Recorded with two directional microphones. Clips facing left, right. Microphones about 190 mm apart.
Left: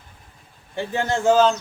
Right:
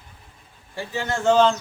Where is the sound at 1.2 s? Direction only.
5° left (ahead or behind).